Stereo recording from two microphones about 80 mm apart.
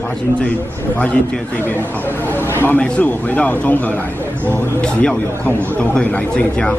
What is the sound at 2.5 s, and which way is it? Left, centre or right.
Speech, left.